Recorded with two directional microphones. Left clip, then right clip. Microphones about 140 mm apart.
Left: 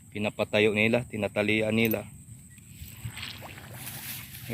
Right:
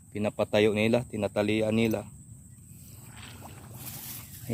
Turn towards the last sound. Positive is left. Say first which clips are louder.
# left 8 dB
turn(degrees=20)  # may be behind; listen again after turning